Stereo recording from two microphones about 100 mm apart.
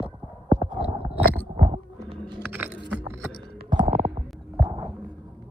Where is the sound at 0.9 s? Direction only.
85° right.